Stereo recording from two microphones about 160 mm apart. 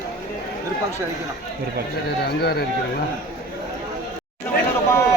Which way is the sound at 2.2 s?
85° left.